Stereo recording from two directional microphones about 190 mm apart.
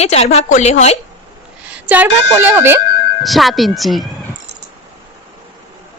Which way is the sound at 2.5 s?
10° right (ahead or behind).